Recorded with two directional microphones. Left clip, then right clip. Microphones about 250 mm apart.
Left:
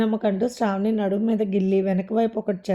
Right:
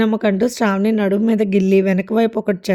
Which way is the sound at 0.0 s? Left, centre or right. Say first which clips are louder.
Right 6 dB; right.